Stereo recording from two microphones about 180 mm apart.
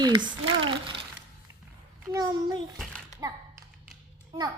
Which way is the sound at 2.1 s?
25° right (ahead or behind).